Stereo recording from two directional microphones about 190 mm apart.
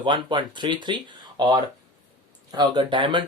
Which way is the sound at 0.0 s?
25° right (ahead or behind).